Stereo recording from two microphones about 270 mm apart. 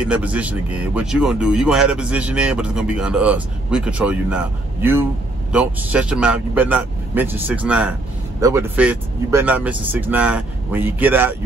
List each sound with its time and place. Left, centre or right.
0.0 s speech: centre
5.5 s speech: centre